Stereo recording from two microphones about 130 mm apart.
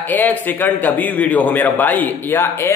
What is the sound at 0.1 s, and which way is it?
A man's voice, 15° left (ahead or behind).